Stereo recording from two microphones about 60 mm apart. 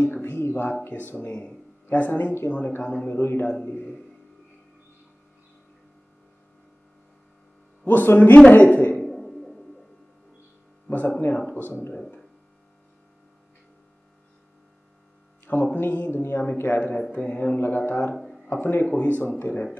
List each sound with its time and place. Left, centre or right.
0.2 s a sound: left
0.8 s speech: left
1.9 s speech: left
2.7 s speech: left
3.1 s speech: left
3.6 s speech: left
7.8 s speech: left
9.0 s a sound: centre
10.9 s speech: left
15.4 s speech: left
17.1 s speech: left
17.6 s speech: left
18.1 s a sound: centre
18.5 s speech: left